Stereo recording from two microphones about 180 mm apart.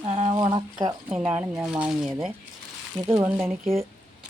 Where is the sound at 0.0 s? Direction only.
35° right (ahead or behind).